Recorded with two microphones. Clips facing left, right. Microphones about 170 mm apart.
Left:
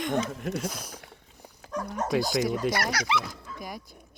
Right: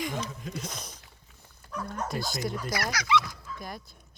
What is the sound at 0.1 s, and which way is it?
Speech, 65° left (ahead or behind).